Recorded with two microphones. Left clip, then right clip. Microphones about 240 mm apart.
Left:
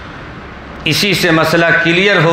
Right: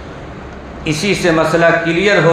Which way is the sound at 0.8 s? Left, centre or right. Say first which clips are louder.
Left 3 dB; left.